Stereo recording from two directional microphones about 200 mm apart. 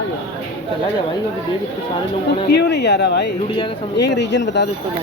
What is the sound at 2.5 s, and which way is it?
Speech, 60° left (ahead or behind).